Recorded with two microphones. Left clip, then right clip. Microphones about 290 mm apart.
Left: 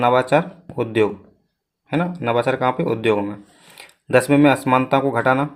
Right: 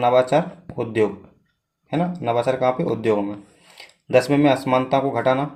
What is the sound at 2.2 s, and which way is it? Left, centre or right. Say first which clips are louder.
Speech: left 1 dB; left.